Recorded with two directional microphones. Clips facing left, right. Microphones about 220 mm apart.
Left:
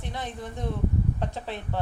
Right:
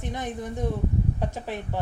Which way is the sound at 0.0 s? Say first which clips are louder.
Right 3 dB; 15° right (ahead or behind).